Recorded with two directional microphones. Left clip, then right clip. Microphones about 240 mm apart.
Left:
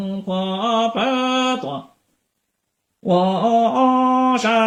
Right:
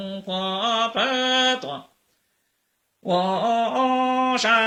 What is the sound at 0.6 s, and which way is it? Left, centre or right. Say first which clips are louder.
Mantra: left 4 dB; centre.